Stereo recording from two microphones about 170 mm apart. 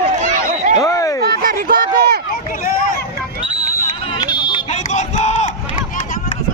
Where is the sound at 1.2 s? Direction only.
60° right (ahead or behind).